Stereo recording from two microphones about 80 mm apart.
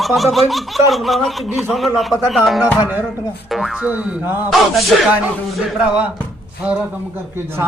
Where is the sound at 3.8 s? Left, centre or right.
Centre.